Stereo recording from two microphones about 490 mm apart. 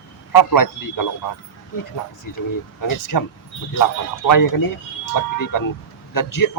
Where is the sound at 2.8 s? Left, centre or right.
Left.